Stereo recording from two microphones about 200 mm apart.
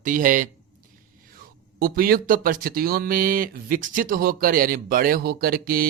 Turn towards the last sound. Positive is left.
turn(degrees=-45)  # may be behind; listen again after turning